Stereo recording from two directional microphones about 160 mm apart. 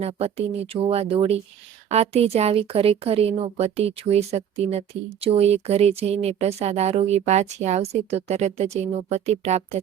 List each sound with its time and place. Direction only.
0.0 s speech: 40° right (ahead or behind)